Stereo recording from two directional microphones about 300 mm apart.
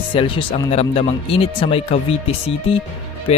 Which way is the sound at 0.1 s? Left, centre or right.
Centre.